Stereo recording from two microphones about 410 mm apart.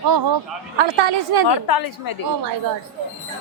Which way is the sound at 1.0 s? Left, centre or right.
Right.